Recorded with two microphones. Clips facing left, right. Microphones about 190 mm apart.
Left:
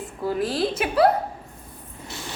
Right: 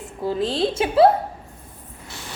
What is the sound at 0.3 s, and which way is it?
Speech, 25° right (ahead or behind).